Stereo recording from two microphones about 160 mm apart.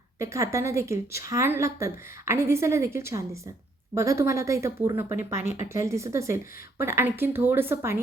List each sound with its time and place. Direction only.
0.2 s a woman's voice: 20° right (ahead or behind)